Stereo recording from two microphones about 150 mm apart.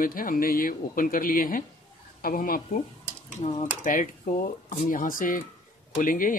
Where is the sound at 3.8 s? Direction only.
65° left (ahead or behind).